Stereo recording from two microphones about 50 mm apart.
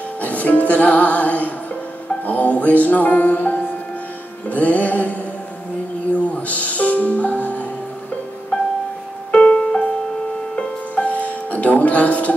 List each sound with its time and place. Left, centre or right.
0.2 s music: left
6.1 s music: left
9.3 s music: left